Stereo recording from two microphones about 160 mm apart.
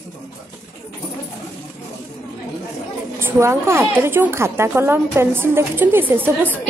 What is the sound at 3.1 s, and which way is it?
Speech, 15° right (ahead or behind).